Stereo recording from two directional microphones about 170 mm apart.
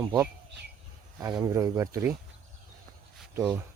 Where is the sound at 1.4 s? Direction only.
20° right (ahead or behind).